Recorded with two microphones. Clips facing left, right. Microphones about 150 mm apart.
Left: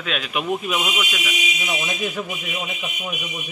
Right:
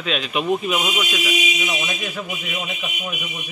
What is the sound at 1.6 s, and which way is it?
Speech, 10° left (ahead or behind).